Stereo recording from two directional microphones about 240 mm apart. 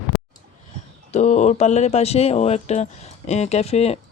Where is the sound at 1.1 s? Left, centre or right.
Left.